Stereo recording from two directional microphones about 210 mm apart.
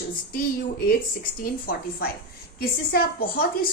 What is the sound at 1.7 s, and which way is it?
A woman's voice, 45° left (ahead or behind).